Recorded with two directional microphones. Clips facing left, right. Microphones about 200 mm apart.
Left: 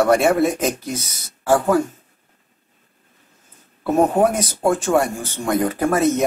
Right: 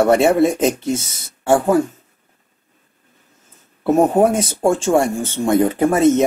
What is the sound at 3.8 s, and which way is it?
Speech, 25° right (ahead or behind).